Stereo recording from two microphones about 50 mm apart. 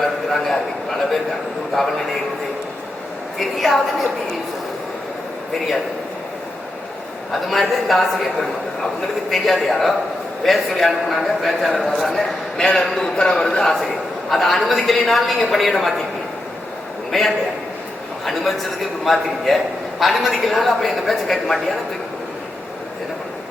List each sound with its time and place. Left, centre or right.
0.0 s a sound: centre
3.3 s a man's voice: centre
7.4 s a man's voice: centre
9.3 s a man's voice: centre
13.7 s a man's voice: centre
17.1 s a man's voice: centre